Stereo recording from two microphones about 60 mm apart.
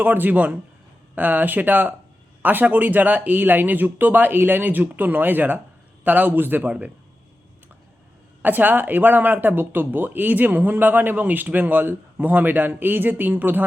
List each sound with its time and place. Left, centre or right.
0.0 s a man's voice: right
8.4 s speech: right